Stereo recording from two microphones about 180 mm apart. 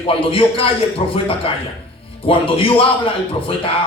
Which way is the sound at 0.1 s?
30° left (ahead or behind).